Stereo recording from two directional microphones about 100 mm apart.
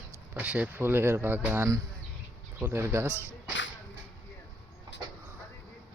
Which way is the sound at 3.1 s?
25° left (ahead or behind).